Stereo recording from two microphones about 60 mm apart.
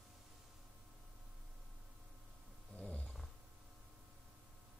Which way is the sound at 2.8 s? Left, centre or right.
Left.